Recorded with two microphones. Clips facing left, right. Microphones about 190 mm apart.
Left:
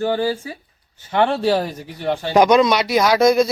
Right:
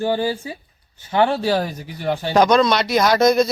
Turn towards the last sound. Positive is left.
turn(degrees=5)  # may be behind; listen again after turning